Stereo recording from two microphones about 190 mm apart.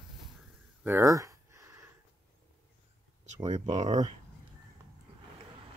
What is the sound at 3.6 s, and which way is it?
Speech, 40° right (ahead or behind).